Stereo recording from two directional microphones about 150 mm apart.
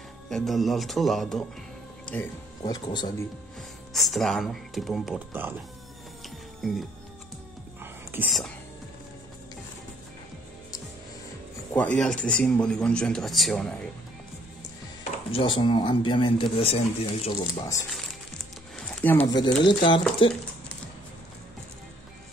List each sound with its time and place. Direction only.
0.3 s speech: centre (ahead or behind)
2.7 s speech: 30° left (ahead or behind)
3.9 s speech: centre (ahead or behind)
6.2 s music: centre (ahead or behind)
7.8 s whispering: 15° right (ahead or behind)
11.7 s speech: 10° left (ahead or behind)
15.3 s speech: 35° left (ahead or behind)
17.4 s speech: 20° left (ahead or behind)
18.8 s a sound: 10° left (ahead or behind)
19.2 s speech: 30° left (ahead or behind)